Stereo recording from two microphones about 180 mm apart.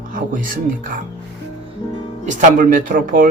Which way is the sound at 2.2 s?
45° right (ahead or behind).